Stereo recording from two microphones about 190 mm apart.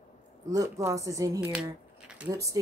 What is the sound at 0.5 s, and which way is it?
Speech, 15° right (ahead or behind).